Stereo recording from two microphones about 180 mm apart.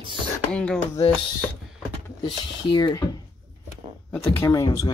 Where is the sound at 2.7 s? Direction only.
25° left (ahead or behind).